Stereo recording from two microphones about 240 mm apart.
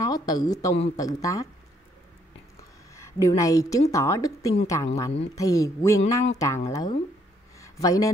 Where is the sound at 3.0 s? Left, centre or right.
Centre.